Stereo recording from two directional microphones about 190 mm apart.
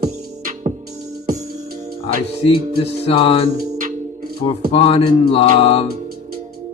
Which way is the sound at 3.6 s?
45° right (ahead or behind).